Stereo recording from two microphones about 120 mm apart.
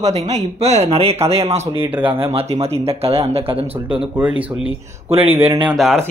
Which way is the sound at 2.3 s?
60° right (ahead or behind).